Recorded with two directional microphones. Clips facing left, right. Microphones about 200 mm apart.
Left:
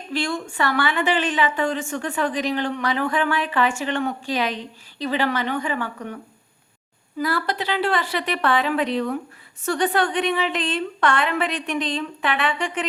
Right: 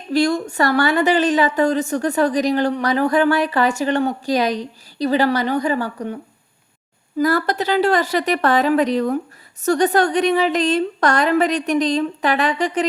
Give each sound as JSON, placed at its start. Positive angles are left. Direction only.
{"t": 0.1, "sound": "a woman's voice", "side_deg": -40}
{"t": 7.2, "sound": "a woman's voice", "side_deg": -45}